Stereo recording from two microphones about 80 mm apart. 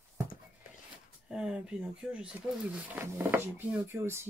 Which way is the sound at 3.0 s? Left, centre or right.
Right.